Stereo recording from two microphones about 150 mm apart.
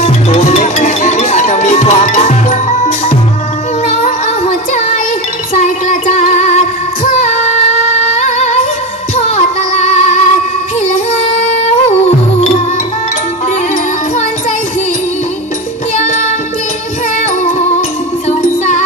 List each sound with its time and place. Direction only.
0.0 s music: 50° left (ahead or behind)
4.7 s music: 50° left (ahead or behind)
5.5 s female singing: 50° left (ahead or behind)
8.2 s music: 50° left (ahead or behind)
16.0 s child singing: 55° left (ahead or behind)
17.2 s music: 50° left (ahead or behind)